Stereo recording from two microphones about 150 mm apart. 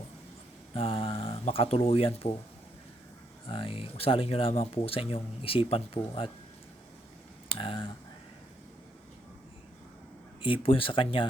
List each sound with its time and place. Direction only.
0.7 s speech: 40° left (ahead or behind)
3.5 s speech: 35° left (ahead or behind)
7.4 s speech: 35° left (ahead or behind)
10.4 s speech: 35° left (ahead or behind)